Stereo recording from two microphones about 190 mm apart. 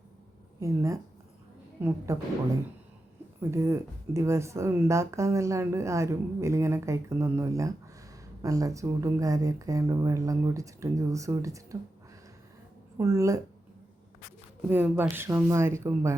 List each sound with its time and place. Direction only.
0.6 s speech: 15° right (ahead or behind)
3.5 s speech: 15° right (ahead or behind)
13.0 s speech: 15° right (ahead or behind)
14.7 s speech: 10° right (ahead or behind)